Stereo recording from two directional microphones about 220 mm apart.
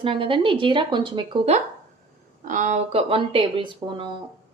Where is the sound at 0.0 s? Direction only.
25° right (ahead or behind).